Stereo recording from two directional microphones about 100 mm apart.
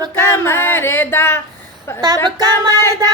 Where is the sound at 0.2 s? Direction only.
25° left (ahead or behind).